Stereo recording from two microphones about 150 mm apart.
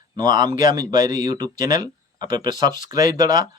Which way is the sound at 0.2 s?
30° right (ahead or behind).